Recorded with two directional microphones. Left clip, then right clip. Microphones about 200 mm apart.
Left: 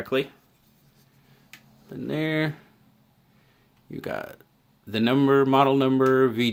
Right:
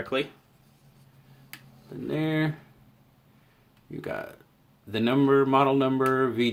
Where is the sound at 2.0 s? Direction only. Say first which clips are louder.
Left 2 dB; 30° left (ahead or behind).